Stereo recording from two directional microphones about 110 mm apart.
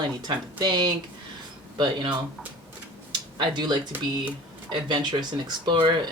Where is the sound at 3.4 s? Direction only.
40° right (ahead or behind).